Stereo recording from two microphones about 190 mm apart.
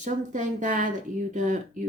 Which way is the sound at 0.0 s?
40° right (ahead or behind).